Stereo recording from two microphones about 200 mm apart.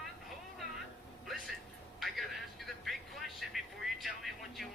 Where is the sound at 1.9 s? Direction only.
Centre (ahead or behind).